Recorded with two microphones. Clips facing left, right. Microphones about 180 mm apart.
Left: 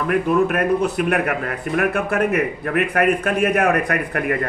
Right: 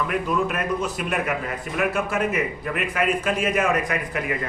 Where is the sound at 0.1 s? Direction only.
55° left (ahead or behind).